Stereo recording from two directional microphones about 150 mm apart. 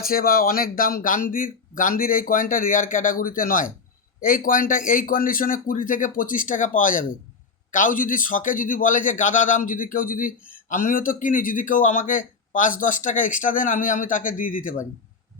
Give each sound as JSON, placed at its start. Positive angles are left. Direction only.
{"t": 0.0, "sound": "speech", "side_deg": 75}